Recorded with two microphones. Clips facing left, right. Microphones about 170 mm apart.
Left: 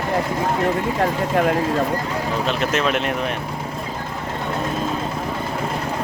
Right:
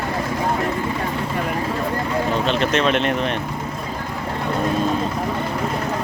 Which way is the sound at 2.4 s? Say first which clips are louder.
Even; 5° left (ahead or behind).